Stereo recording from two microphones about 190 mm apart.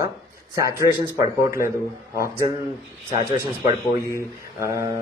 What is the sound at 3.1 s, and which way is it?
Speech, 15° right (ahead or behind).